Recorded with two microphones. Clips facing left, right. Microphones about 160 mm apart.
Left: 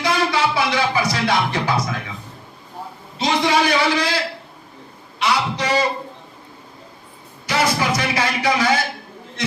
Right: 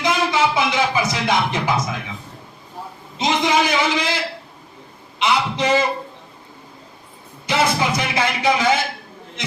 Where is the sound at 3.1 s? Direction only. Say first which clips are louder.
Even; 20° right (ahead or behind).